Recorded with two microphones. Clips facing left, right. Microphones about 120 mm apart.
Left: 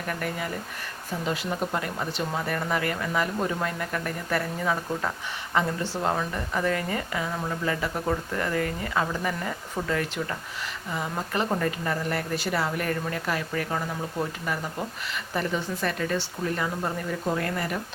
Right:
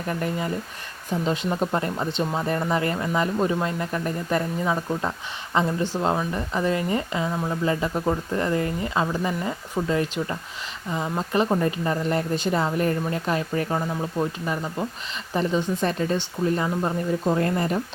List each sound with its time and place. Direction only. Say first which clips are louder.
0.1 s a woman's voice: right 5 dB; 25° right (ahead or behind)